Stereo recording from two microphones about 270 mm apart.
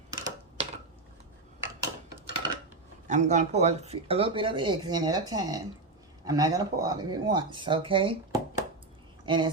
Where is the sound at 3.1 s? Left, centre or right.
Right.